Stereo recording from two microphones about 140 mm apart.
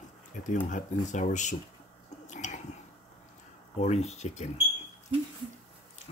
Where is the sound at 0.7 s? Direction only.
60° left (ahead or behind).